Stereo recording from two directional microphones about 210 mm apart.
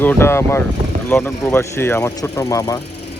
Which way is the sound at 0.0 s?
10° left (ahead or behind).